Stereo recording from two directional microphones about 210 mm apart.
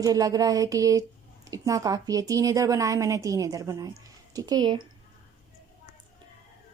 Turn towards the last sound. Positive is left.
turn(degrees=-20)  # may be behind; listen again after turning